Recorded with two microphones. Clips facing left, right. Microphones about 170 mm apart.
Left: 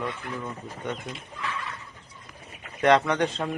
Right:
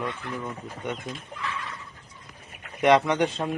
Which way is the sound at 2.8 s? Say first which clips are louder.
Right 1 dB; 15° right (ahead or behind).